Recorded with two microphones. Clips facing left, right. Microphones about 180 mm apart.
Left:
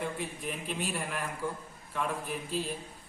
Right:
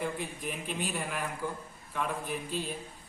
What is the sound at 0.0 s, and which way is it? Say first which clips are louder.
A man's voice: right 1 dB; centre (ahead or behind).